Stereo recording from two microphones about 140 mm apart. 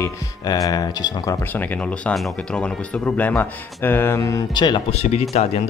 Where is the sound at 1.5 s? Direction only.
10° left (ahead or behind); by 4.9 s 35° left (ahead or behind).